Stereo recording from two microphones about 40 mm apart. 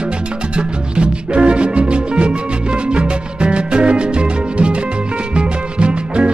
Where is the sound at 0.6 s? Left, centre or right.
Right.